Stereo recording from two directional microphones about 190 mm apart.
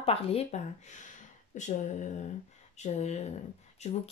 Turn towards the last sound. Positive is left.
turn(degrees=35)  # may be behind; listen again after turning